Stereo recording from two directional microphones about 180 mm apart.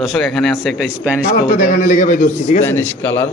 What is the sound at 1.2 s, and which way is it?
A man's voice, 50° left (ahead or behind).